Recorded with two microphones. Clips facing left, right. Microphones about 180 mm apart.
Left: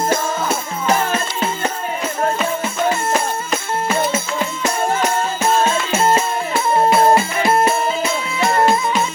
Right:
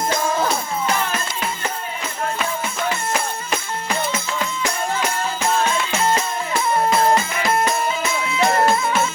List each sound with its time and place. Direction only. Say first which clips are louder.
0.9 s music: left 8 dB; 35° left (ahead or behind)
4.1 s music: left 4 dB; 25° left (ahead or behind)